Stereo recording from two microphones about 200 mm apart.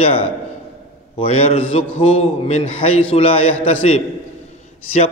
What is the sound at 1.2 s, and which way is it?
Mantra, 30° left (ahead or behind).